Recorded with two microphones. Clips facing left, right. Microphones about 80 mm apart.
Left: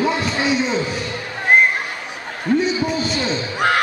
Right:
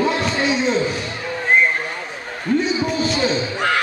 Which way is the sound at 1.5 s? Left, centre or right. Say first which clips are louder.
Left 2 dB; left.